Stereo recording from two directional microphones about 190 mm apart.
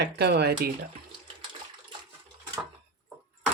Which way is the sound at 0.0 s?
60° right (ahead or behind).